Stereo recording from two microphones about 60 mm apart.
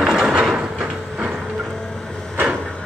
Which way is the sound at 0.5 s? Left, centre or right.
Centre.